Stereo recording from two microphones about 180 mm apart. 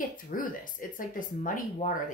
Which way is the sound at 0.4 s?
50° left (ahead or behind).